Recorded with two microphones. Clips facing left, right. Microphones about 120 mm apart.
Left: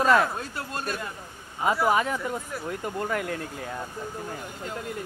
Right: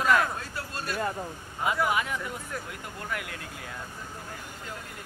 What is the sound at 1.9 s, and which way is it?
Speech, 35° left (ahead or behind).